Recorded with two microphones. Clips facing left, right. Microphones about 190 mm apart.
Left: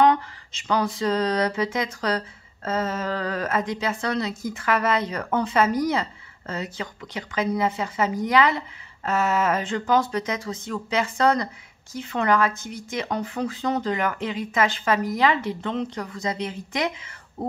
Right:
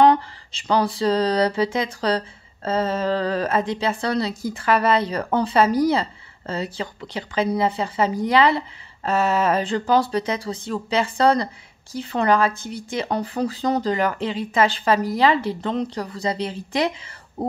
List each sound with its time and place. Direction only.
0.0 s speech: 35° right (ahead or behind)